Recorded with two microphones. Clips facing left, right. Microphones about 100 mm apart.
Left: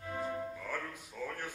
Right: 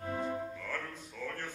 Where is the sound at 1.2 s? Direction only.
15° left (ahead or behind).